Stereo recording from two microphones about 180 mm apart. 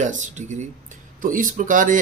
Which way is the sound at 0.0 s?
45° right (ahead or behind).